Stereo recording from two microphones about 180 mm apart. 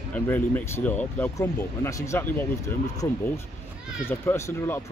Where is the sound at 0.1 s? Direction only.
10° left (ahead or behind).